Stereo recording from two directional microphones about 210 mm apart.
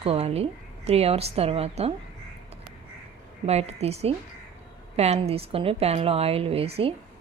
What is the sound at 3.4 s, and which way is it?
A woman's voice, 30° right (ahead or behind).